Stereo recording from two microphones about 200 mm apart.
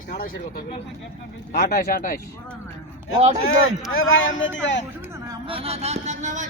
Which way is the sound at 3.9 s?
75° left (ahead or behind).